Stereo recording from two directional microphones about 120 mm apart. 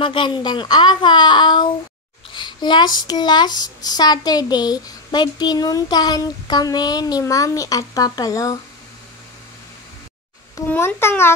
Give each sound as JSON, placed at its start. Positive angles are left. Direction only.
{"t": 0.0, "sound": "speech", "side_deg": 45}
{"t": 10.7, "sound": "a child's voice", "side_deg": 15}